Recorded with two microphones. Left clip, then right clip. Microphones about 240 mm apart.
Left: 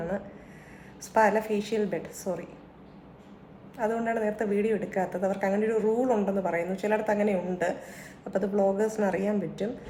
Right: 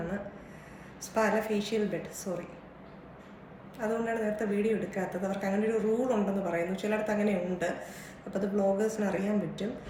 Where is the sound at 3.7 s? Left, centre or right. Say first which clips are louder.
Left 3 dB; centre.